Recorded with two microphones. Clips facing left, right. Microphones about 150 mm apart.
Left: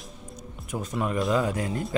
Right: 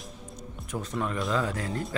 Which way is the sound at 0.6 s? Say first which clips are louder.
Left 2 dB; 10° left (ahead or behind).